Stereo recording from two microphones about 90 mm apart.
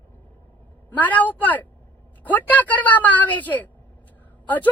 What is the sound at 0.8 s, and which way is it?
A woman's voice, 20° left (ahead or behind).